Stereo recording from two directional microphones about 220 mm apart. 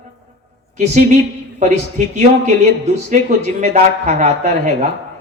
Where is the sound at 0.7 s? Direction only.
30° right (ahead or behind).